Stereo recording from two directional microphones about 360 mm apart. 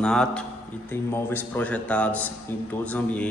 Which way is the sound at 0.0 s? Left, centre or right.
Centre.